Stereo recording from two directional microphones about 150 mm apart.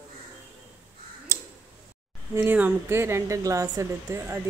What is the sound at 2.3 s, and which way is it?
A woman's voice, 10° right (ahead or behind).